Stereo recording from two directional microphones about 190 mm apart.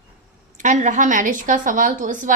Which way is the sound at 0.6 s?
40° right (ahead or behind).